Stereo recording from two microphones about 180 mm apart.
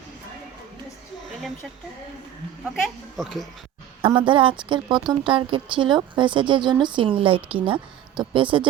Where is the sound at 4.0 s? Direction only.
25° right (ahead or behind).